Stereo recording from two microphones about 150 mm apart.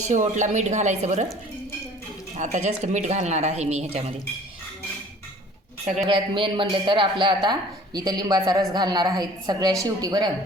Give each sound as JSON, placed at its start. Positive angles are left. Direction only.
{"t": 0.1, "sound": "speech", "side_deg": -55}
{"t": 2.3, "sound": "speech", "side_deg": -50}
{"t": 6.1, "sound": "a man's voice", "side_deg": -35}